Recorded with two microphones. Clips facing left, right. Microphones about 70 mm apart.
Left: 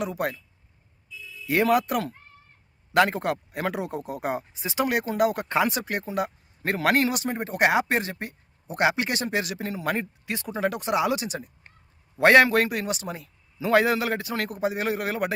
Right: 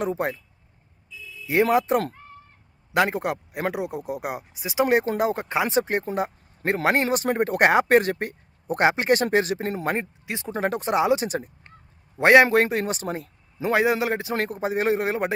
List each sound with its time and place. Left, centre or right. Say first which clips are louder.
0.2 s speech: right 2 dB; right
1.5 s speech: right 2 dB; right
4.9 s a man's voice: right 1 dB; right
7.3 s speech: right 4 dB; right
8.8 s a man's voice: right 4 dB; right
9.8 s speech: right 1 dB; right
10.5 s a man's voice: right 2 dB; right
12.1 s a man's voice: right 2 dB; centre; by 13.3 s right
13.6 s speech: even; centre